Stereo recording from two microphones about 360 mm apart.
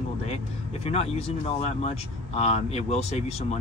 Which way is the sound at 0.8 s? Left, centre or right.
Centre.